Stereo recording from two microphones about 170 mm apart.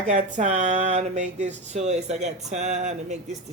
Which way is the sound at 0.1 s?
45° right (ahead or behind).